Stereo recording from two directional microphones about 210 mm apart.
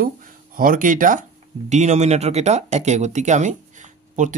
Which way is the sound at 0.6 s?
40° right (ahead or behind).